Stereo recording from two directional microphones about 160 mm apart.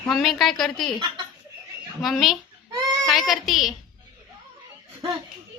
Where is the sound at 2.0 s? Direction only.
Centre (ahead or behind).